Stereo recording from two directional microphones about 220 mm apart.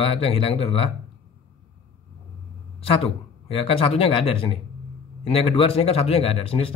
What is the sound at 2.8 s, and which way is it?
Speech, 25° left (ahead or behind).